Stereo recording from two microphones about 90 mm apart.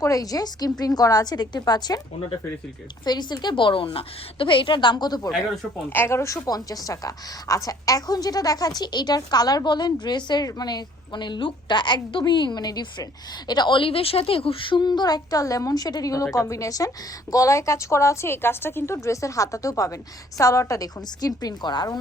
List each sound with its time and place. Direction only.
0.0 s a woman's voice: 40° left (ahead or behind)
3.0 s a woman's voice: 50° left (ahead or behind)
5.9 s a woman's voice: 25° left (ahead or behind); by 21.9 s 55° left (ahead or behind)